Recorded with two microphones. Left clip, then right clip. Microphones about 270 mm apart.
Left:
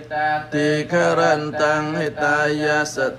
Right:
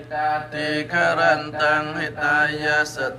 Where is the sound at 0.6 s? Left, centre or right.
Left.